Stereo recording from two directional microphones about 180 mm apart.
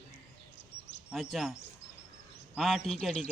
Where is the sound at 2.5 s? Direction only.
Centre (ahead or behind).